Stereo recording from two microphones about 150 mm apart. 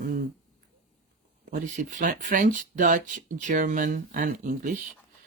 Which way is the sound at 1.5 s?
60° right (ahead or behind).